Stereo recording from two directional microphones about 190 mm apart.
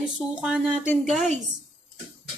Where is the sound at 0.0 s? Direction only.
5° right (ahead or behind).